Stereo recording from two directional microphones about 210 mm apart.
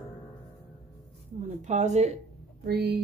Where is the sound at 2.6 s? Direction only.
50° right (ahead or behind).